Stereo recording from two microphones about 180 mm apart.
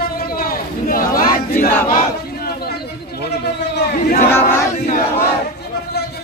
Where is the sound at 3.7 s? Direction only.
65° left (ahead or behind).